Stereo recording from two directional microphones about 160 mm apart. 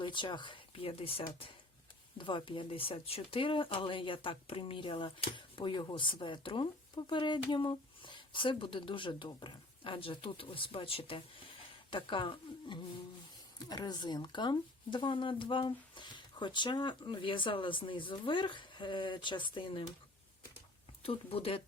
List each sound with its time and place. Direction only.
0.0 s speech: 30° left (ahead or behind)
21.0 s speech: 35° left (ahead or behind)